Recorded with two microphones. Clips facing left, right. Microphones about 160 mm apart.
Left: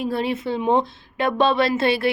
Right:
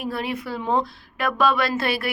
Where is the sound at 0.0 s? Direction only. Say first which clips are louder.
Left 4 dB; 25° left (ahead or behind).